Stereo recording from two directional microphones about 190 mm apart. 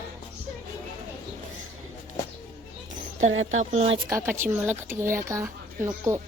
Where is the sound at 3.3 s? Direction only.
90° right.